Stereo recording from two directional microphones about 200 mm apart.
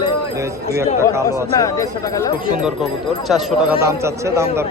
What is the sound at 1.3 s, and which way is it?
Speech, 15° left (ahead or behind).